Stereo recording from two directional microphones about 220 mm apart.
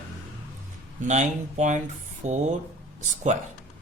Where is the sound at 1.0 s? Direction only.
30° right (ahead or behind).